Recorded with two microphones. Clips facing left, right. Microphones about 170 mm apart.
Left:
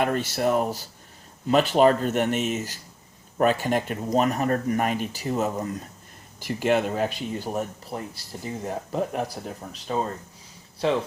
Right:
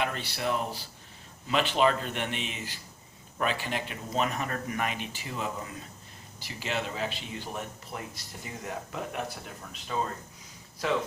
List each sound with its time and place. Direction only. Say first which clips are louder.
0.0 s speech: left 8 dB; 45° left (ahead or behind)
6.4 s speech: left 11 dB; 55° left (ahead or behind); by 10.0 s 35° left (ahead or behind)
10.8 s speech: left 5 dB; 25° left (ahead or behind)